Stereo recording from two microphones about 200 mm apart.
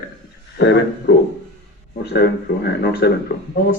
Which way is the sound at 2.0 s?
55° left (ahead or behind).